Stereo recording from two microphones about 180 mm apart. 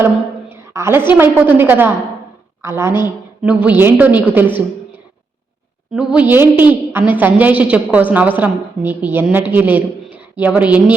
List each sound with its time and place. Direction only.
0.5 s a woman's voice: 15° right (ahead or behind)
5.9 s a woman's voice: 5° right (ahead or behind)